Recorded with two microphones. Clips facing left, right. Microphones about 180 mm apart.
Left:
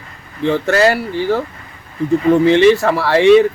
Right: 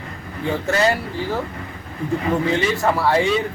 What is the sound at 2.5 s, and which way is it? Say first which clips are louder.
Speech: left 9 dB; 75° left (ahead or behind).